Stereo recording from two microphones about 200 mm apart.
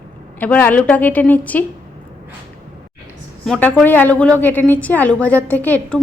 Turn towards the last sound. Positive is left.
turn(degrees=5)  # may be behind; listen again after turning